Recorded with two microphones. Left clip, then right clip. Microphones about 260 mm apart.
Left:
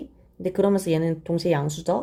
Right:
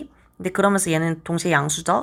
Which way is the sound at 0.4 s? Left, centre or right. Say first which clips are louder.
Right 2 dB; right.